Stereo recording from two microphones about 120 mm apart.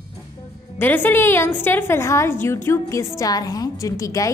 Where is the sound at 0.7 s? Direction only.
15° left (ahead or behind).